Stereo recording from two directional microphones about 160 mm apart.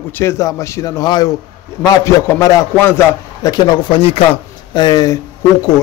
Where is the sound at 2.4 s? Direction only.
20° left (ahead or behind).